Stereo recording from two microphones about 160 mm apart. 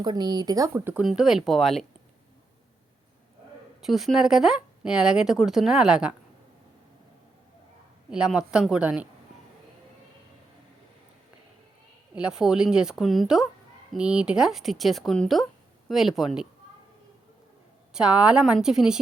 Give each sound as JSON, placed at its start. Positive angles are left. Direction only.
{"t": 0.0, "sound": "speech", "side_deg": -25}
{"t": 1.0, "sound": "speech", "side_deg": -5}
{"t": 3.8, "sound": "speech", "side_deg": 0}
{"t": 8.1, "sound": "speech", "side_deg": -5}
{"t": 12.1, "sound": "speech", "side_deg": -5}
{"t": 17.9, "sound": "speech", "side_deg": -5}